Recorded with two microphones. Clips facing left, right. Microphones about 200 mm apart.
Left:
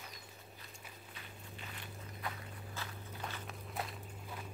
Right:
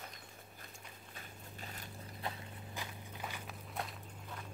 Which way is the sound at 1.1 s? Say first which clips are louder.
Right 1 dB; 40° right (ahead or behind).